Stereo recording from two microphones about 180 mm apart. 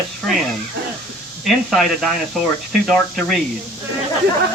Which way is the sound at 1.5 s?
Centre (ahead or behind).